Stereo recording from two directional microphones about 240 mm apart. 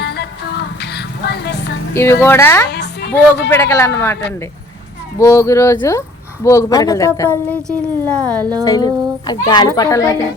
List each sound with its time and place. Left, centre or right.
0.0 s music: left
1.9 s a woman's voice: centre
2.6 s a woman's voice: left
3.5 s a woman's voice: centre
5.2 s a woman's voice: centre
8.6 s a woman's voice: centre